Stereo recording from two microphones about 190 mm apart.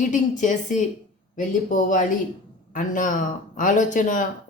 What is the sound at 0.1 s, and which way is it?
A woman's voice, 40° left (ahead or behind).